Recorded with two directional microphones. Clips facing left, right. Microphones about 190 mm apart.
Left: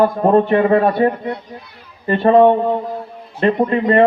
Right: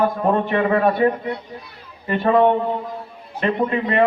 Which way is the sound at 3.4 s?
35° left (ahead or behind).